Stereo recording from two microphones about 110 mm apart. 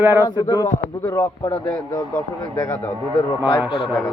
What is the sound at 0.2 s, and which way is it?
Speech, 40° left (ahead or behind).